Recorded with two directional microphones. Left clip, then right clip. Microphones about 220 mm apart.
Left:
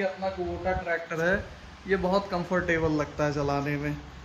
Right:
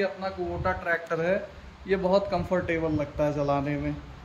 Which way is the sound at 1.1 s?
25° right (ahead or behind).